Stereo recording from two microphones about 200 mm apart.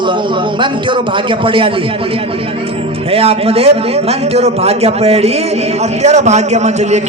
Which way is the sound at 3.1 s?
30° right (ahead or behind).